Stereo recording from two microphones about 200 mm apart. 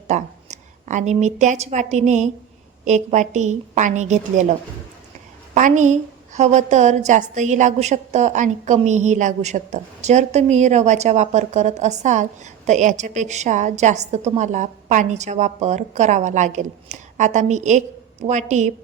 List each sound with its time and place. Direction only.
0.1 s a woman's voice: 35° right (ahead or behind)
5.5 s a woman's voice: 40° right (ahead or behind)